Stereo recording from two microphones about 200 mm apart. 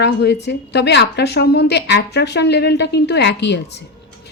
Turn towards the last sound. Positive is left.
turn(degrees=60)  # may be behind; listen again after turning